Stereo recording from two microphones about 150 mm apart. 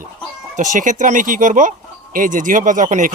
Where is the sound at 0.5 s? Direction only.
55° right (ahead or behind).